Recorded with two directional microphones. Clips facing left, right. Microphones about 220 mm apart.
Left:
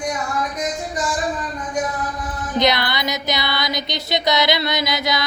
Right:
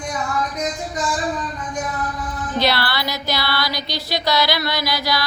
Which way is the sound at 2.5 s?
20° left (ahead or behind).